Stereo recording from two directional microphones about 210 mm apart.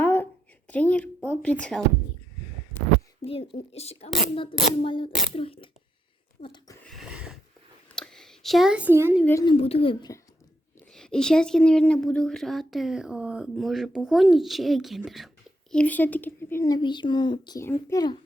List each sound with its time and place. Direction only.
0.0 s a sound: 10° left (ahead or behind)
0.7 s speech: 5° left (ahead or behind)
3.2 s speech: 25° left (ahead or behind)
6.8 s a sound: centre (ahead or behind)
7.9 s speech: centre (ahead or behind)
9.2 s speech: 15° left (ahead or behind)
10.9 s speech: 5° left (ahead or behind)